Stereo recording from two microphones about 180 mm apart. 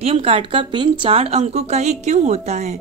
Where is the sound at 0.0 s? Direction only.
35° right (ahead or behind).